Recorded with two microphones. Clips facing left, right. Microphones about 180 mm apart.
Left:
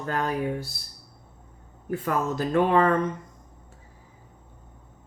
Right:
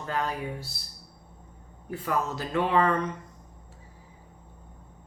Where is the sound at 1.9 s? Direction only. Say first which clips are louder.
Left 3 dB; 50° left (ahead or behind).